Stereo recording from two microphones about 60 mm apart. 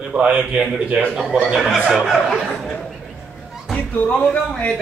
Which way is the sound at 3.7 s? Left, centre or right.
Left.